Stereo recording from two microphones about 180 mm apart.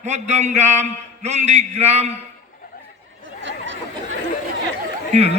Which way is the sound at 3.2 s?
90° right.